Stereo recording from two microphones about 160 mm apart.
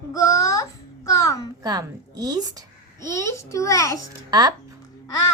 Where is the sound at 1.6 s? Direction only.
25° right (ahead or behind).